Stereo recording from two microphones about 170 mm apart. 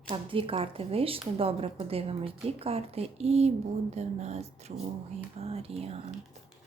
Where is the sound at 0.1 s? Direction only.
30° right (ahead or behind).